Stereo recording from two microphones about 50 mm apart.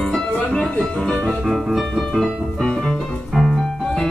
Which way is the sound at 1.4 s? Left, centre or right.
Centre.